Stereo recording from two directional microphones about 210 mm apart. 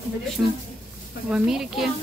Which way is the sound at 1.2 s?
5° right (ahead or behind).